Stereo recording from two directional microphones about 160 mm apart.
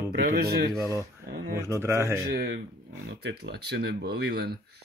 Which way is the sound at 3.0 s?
90° right.